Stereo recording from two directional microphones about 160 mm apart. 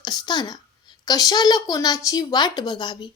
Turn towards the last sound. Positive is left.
turn(degrees=25)  # may be behind; listen again after turning